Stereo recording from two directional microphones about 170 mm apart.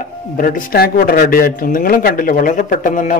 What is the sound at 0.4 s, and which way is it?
A man's voice, 55° left (ahead or behind).